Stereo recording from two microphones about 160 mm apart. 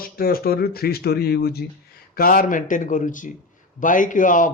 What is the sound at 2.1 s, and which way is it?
A woman's voice, 65° left (ahead or behind).